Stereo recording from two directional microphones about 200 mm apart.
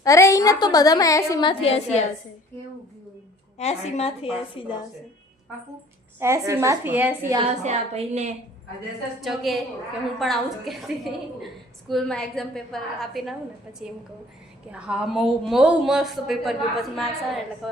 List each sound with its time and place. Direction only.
0.0 s a woman's voice: 15° left (ahead or behind); by 2.0 s 30° left (ahead or behind)
3.6 s a woman's voice: 30° left (ahead or behind)
6.1 s a woman's voice: 15° right (ahead or behind)
7.6 s a woman's voice: 35° right (ahead or behind)
9.2 s a woman's voice: centre (ahead or behind)
14.7 s a woman's voice: 5° right (ahead or behind)